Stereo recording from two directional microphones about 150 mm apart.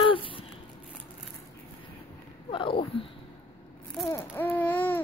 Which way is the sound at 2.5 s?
35° left (ahead or behind).